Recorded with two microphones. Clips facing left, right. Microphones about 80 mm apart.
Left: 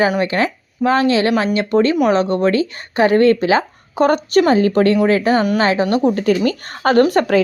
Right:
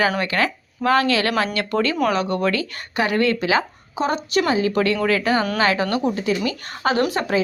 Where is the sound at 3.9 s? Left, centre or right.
Left.